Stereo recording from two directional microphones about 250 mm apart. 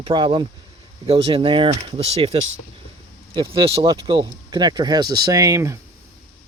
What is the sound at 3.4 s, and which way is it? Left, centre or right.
Speech, right.